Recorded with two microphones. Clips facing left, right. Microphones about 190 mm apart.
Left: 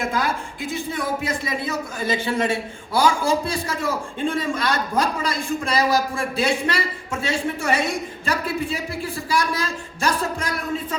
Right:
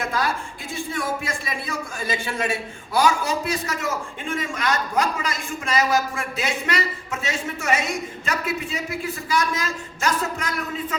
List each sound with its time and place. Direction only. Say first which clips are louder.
0.7 s a man's voice: left 1 dB; 20° left (ahead or behind)